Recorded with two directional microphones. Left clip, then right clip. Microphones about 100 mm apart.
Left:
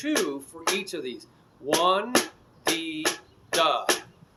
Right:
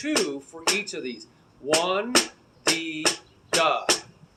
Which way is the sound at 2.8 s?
35° left (ahead or behind).